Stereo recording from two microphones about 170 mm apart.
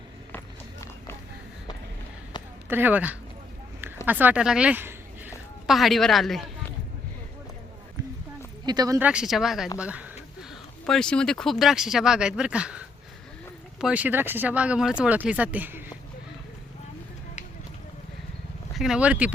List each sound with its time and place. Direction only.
0.3 s run: 15° left (ahead or behind)
2.6 s speech: 10° right (ahead or behind)
5.6 s speech: centre (ahead or behind)
8.6 s speech: 20° right (ahead or behind)
9.0 s speech: 5° right (ahead or behind)
13.8 s speech: 10° right (ahead or behind)
18.7 s speech: centre (ahead or behind)